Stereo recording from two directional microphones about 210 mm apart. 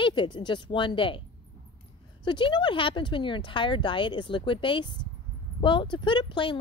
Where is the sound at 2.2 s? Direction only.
20° left (ahead or behind).